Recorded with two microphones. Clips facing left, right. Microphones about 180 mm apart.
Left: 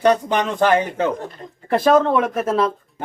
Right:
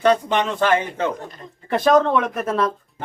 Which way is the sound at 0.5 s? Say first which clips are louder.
Left 3 dB; 40° left (ahead or behind).